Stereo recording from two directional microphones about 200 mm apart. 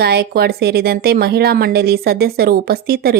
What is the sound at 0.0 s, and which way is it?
Speech, 55° right (ahead or behind).